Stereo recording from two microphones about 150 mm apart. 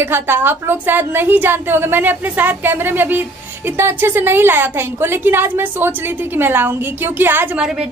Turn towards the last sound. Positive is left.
turn(degrees=-5)  # may be behind; listen again after turning